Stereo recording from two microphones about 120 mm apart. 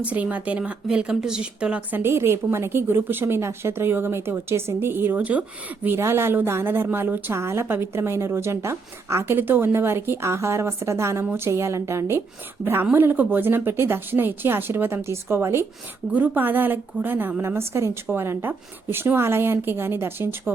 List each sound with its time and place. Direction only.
0.0 s a woman's voice: 10° right (ahead or behind)